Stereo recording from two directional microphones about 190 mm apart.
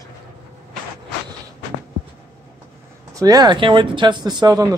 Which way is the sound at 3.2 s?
20° right (ahead or behind).